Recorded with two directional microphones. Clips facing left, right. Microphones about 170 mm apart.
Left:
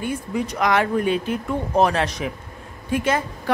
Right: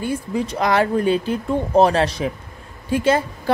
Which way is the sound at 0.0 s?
30° right (ahead or behind).